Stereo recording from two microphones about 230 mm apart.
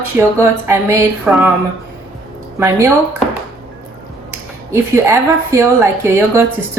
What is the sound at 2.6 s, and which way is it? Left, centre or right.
Speech, centre.